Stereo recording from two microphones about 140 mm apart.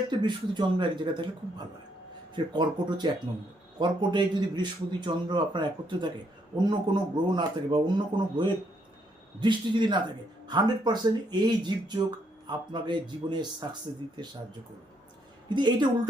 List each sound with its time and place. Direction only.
0.1 s a man's voice: 30° right (ahead or behind)
15.4 s a man's voice: 35° right (ahead or behind)